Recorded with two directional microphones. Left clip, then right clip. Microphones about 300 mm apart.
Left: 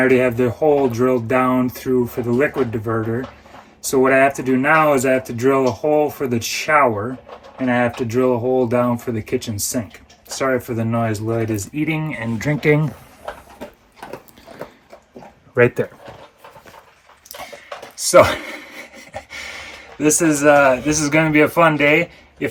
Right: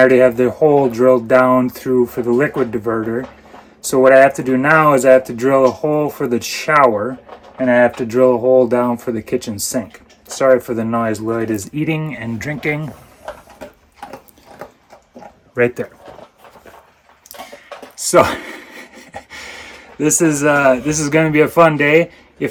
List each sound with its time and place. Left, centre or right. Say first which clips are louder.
0.2 s speech: right 6 dB; centre
15.5 s speech: left 1 dB; centre
17.3 s a sound: even; centre